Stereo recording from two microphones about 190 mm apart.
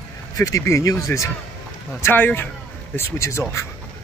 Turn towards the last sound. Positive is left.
turn(degrees=15)  # may be behind; listen again after turning